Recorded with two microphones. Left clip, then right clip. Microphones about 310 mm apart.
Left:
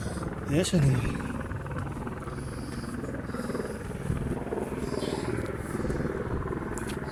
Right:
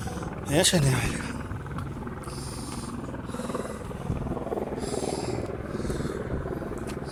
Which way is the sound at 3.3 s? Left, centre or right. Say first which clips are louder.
Right 3 dB; centre.